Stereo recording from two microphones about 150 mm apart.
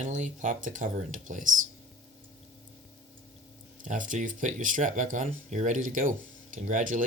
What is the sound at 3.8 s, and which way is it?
Speech, 60° right (ahead or behind).